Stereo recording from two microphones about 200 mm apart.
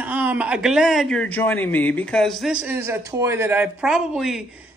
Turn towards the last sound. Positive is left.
turn(degrees=-5)  # may be behind; listen again after turning